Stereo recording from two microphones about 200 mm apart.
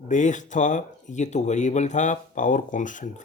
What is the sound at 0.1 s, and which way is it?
Speech, 40° left (ahead or behind).